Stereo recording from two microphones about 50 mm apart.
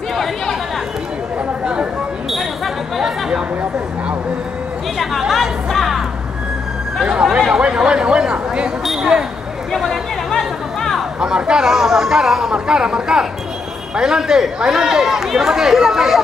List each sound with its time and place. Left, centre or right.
0.1 s chatter: centre
1.6 s chatter: centre
2.3 s a sound: centre
5.3 s music: centre
7.2 s chatter: centre
8.8 s a sound: centre
9.8 s chatter: centre
11.1 s speech: centre